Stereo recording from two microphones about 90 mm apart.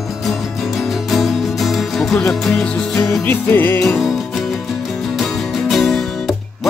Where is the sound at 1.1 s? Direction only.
Centre (ahead or behind).